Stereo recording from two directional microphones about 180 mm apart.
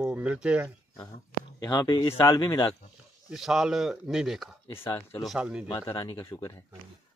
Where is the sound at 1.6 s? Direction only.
20° left (ahead or behind).